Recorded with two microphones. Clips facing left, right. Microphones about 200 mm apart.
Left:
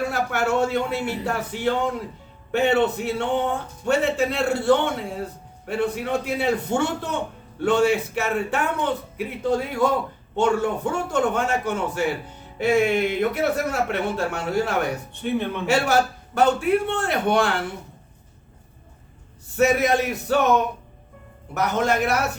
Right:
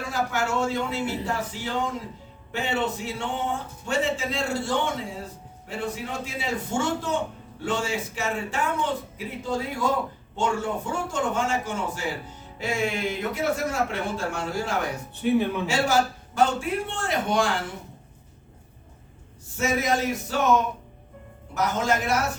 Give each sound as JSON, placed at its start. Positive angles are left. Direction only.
{"t": 0.1, "sound": "a man's voice", "side_deg": 60}
{"t": 15.2, "sound": "speech", "side_deg": -5}
{"t": 15.6, "sound": "a man's voice", "side_deg": 65}
{"t": 19.5, "sound": "a man's voice", "side_deg": 60}
{"t": 21.5, "sound": "a man's voice", "side_deg": 60}